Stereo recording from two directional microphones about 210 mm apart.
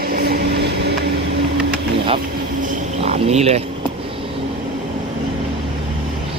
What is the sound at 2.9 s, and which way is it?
Speech, 30° right (ahead or behind).